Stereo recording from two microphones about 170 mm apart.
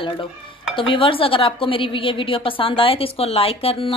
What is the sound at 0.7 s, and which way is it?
A woman's voice, 30° left (ahead or behind).